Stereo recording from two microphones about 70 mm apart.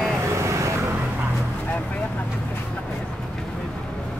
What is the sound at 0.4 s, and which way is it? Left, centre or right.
Vehicle, right.